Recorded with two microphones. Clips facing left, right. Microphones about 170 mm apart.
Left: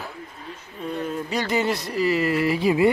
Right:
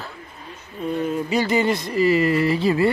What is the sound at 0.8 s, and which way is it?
Speech, 5° right (ahead or behind).